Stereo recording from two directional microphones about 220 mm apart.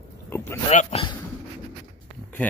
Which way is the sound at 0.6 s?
30° left (ahead or behind).